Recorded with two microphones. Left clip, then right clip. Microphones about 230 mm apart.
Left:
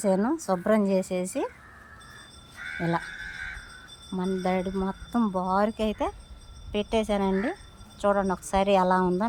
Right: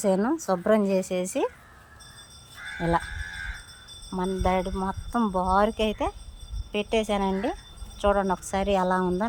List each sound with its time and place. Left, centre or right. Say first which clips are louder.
0.0 s a woman's voice: right 1 dB; centre
2.6 s caw: left 1 dB; right
4.1 s a woman's voice: right 2 dB; centre